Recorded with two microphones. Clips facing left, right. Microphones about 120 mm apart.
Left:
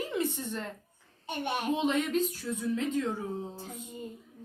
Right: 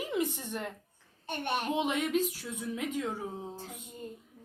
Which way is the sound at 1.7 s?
10° right (ahead or behind).